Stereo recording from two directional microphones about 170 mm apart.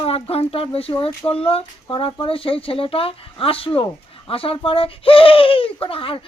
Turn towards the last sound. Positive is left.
turn(degrees=30)  # may be behind; listen again after turning